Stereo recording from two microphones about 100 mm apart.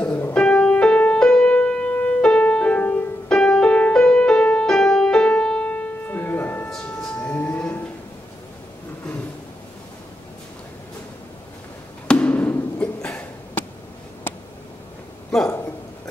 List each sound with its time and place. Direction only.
0.2 s music: 15° left (ahead or behind)
12.1 s wood block: 15° left (ahead or behind)
14.3 s a sound: 20° left (ahead or behind)